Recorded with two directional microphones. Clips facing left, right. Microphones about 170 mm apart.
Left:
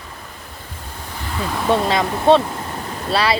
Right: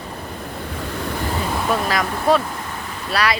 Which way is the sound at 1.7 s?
25° left (ahead or behind).